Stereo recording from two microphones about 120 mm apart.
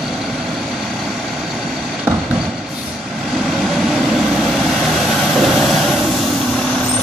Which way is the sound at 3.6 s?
Centre (ahead or behind).